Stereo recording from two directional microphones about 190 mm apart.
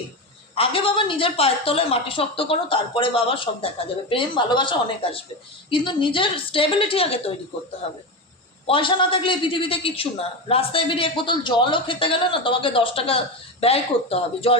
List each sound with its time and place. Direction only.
0.5 s a man's voice: 30° left (ahead or behind)
8.6 s a man's voice: 25° left (ahead or behind)